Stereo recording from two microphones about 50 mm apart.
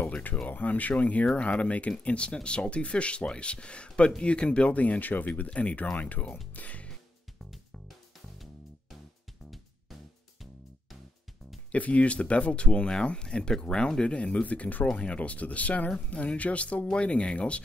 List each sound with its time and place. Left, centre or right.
0.0 s a sound: left
0.5 s speech: left
6.5 s music: left
11.7 s speech: left